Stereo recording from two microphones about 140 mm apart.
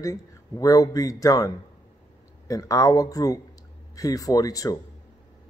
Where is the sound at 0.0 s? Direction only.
25° left (ahead or behind).